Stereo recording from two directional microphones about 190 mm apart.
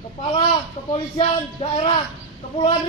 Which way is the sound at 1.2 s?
30° left (ahead or behind).